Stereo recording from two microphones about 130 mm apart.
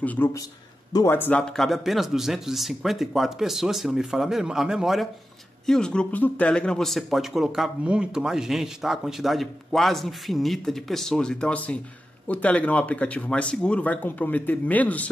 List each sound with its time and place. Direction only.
0.0 s speech: 10° left (ahead or behind)
1.4 s speech: 5° left (ahead or behind)